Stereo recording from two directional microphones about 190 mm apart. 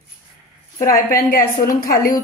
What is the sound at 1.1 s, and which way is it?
A woman's voice, 50° left (ahead or behind).